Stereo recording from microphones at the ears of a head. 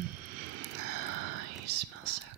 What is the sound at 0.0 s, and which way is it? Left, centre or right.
Whispering, right.